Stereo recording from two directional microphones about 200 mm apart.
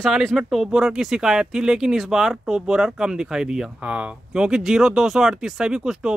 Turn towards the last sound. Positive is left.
turn(degrees=-5)  # may be behind; listen again after turning